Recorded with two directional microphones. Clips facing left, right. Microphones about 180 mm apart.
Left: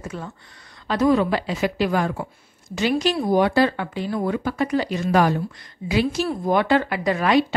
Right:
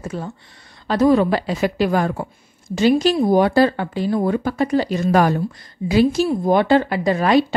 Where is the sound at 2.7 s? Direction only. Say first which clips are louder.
Right 6 dB; 30° right (ahead or behind).